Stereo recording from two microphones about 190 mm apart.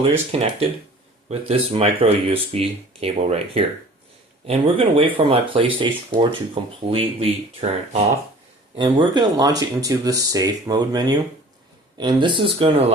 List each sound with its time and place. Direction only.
0.3 s speech: 30° right (ahead or behind)